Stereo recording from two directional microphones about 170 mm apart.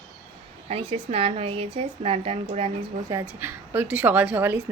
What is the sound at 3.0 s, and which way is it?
A woman's voice, 15° right (ahead or behind).